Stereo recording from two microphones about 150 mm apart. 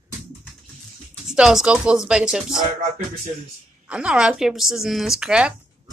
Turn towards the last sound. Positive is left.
turn(degrees=-5)  # may be behind; listen again after turning